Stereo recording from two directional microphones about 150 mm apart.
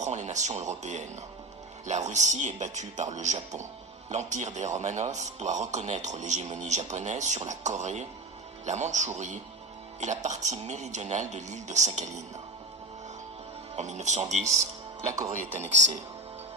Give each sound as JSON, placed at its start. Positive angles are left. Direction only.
{"t": 0.0, "sound": "a man's voice", "side_deg": -50}
{"t": 13.7, "sound": "a man's voice", "side_deg": -50}